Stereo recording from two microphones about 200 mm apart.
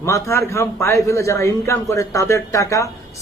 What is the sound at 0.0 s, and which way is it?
A man's voice, 15° left (ahead or behind).